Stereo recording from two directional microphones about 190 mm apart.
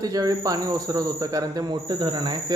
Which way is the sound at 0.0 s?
20° right (ahead or behind).